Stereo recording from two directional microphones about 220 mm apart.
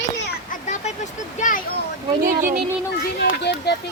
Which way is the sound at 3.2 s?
50° left (ahead or behind).